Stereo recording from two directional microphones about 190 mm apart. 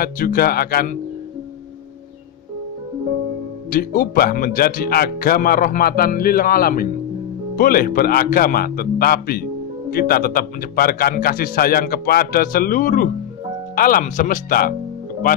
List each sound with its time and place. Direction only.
0.0 s a man's voice: 50° left (ahead or behind)
3.7 s a man's voice: 50° left (ahead or behind)